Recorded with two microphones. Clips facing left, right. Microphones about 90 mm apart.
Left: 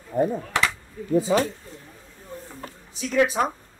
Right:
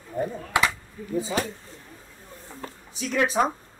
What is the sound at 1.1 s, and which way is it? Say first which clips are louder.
Speech: left 6 dB; 45° left (ahead or behind).